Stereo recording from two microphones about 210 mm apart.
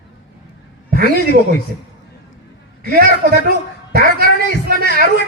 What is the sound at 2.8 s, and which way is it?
A man's voice, 45° right (ahead or behind).